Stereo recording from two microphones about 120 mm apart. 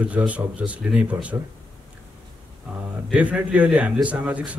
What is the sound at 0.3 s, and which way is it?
A man's voice, 10° right (ahead or behind).